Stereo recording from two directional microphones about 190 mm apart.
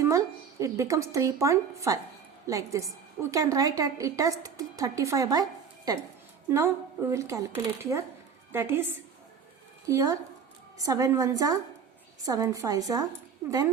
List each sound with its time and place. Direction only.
0.0 s a woman's voice: 15° right (ahead or behind)